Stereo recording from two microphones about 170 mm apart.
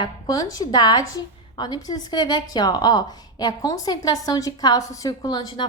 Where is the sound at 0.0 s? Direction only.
20° left (ahead or behind).